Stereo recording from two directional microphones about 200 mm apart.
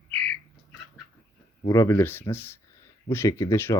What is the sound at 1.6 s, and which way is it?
Speech, 15° left (ahead or behind).